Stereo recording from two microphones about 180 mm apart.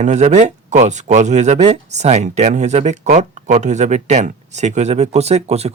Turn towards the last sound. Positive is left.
turn(degrees=-35)  # may be behind; listen again after turning